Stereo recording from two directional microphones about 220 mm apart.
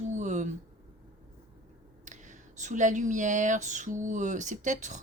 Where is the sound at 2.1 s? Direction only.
35° right (ahead or behind).